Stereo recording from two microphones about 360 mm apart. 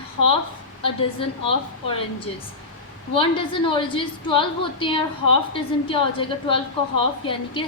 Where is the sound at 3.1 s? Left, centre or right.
Centre.